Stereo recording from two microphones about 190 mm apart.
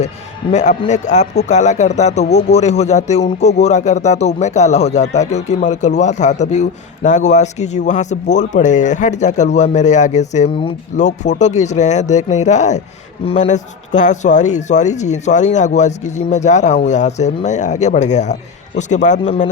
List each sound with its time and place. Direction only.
0.5 s speech: 40° left (ahead or behind)